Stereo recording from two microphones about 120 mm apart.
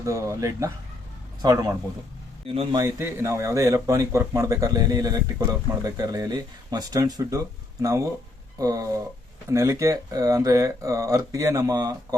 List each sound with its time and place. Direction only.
0.0 s a man's voice: 25° right (ahead or behind)
2.7 s speech: 20° right (ahead or behind)